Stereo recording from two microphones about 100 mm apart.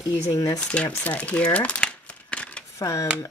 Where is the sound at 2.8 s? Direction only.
35° left (ahead or behind).